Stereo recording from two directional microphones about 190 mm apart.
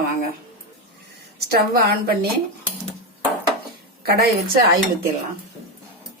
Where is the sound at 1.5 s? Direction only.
55° right (ahead or behind).